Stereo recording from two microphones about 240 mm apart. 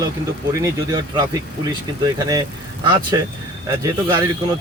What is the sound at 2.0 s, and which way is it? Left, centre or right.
Speech, centre.